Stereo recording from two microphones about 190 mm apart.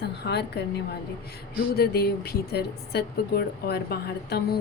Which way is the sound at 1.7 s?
55° left (ahead or behind).